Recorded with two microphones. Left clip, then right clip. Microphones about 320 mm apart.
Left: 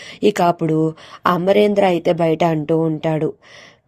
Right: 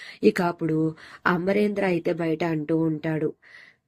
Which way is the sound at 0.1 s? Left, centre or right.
Left.